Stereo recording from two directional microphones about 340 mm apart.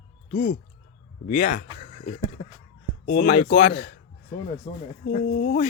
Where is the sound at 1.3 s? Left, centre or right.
Left.